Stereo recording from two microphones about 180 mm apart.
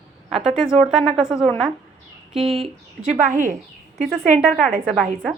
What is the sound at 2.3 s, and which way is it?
Speech, 35° right (ahead or behind).